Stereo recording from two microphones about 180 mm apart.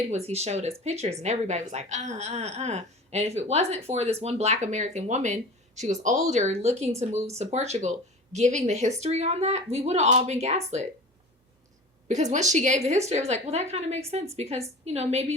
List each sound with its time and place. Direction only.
0.1 s speech: 35° right (ahead or behind)
12.0 s speech: 40° right (ahead or behind)